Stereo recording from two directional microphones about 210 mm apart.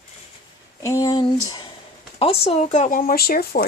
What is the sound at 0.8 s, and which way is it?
Speech, 15° left (ahead or behind).